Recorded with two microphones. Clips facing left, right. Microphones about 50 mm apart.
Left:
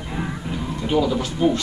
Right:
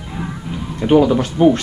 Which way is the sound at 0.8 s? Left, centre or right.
Right.